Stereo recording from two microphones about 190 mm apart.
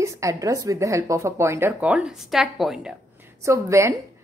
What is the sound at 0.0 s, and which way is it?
Speech, 15° right (ahead or behind).